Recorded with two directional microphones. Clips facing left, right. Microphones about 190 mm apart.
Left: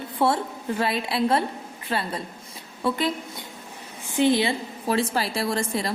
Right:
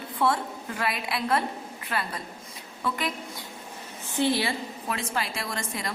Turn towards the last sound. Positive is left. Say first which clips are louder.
# left 8 dB
turn(degrees=30)  # may be behind; listen again after turning